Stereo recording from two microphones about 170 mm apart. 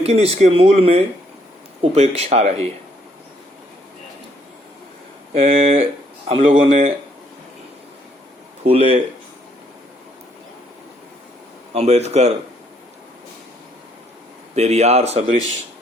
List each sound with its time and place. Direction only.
0.0 s speech: 35° right (ahead or behind)
5.3 s speech: 35° right (ahead or behind)
5.8 s a sound: 35° right (ahead or behind)
6.6 s speech: 35° right (ahead or behind)
8.6 s speech: 40° right (ahead or behind)
11.7 s speech: 40° right (ahead or behind)
14.5 s speech: 40° right (ahead or behind)